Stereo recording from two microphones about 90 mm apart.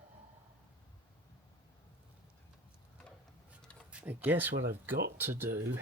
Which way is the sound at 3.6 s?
10° left (ahead or behind).